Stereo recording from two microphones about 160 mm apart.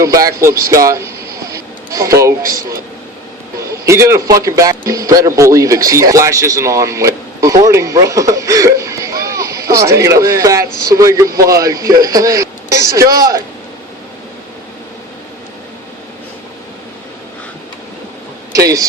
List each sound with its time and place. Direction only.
0.0 s a man's voice: 20° right (ahead or behind)
1.5 s a sound: 20° right (ahead or behind)
2.5 s a man's voice: 20° right (ahead or behind)
18.5 s a man's voice: 20° right (ahead or behind)